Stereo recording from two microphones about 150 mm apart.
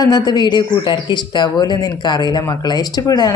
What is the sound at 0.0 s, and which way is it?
A woman's voice, 25° left (ahead or behind).